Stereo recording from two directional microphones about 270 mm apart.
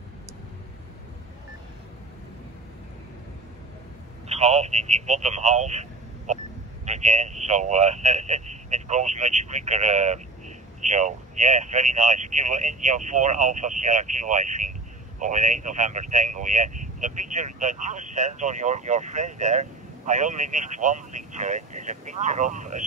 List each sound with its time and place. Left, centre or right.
4.3 s speech: right